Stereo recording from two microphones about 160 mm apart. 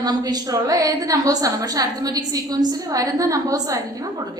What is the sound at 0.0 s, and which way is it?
A woman's voice, 25° right (ahead or behind).